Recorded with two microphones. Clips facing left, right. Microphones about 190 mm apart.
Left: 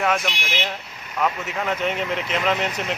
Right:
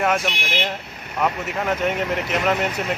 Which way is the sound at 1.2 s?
10° right (ahead or behind).